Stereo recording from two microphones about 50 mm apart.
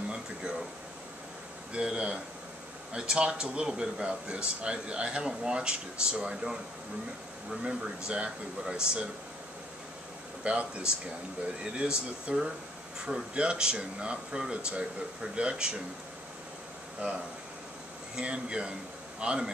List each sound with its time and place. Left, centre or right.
1.7 s speech: centre
7.6 s speech: centre
10.4 s speech: right
12.3 s speech: centre
17.0 s speech: right